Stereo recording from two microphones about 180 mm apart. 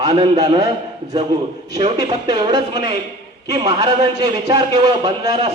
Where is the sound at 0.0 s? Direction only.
20° right (ahead or behind).